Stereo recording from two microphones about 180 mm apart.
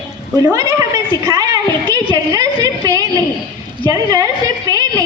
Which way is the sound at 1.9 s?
20° right (ahead or behind).